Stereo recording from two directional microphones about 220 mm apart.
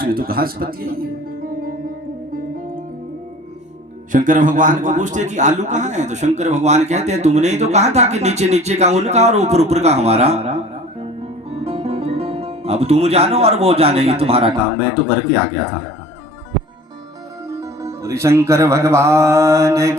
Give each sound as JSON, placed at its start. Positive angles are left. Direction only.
{"t": 0.0, "sound": "a man's voice", "side_deg": -40}
{"t": 4.1, "sound": "a man's voice", "side_deg": -35}
{"t": 17.5, "sound": "speech", "side_deg": -15}